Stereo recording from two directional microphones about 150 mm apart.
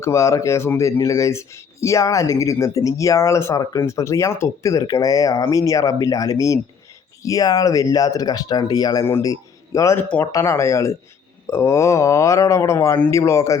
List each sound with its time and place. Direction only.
0.0 s speech: 20° left (ahead or behind)